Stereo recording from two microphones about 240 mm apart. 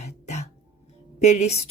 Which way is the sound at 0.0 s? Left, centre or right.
Left.